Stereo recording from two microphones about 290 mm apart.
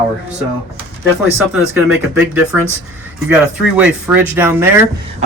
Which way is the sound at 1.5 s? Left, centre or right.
Centre.